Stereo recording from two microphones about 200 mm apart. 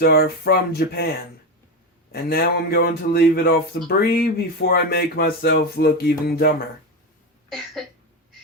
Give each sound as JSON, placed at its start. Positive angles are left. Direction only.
{"t": 0.0, "sound": "speech", "side_deg": 50}
{"t": 2.3, "sound": "speech", "side_deg": 55}
{"t": 7.5, "sound": "a sound", "side_deg": 0}